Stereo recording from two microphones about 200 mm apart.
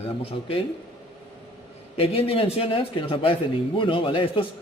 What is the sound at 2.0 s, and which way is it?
Speech, 30° left (ahead or behind).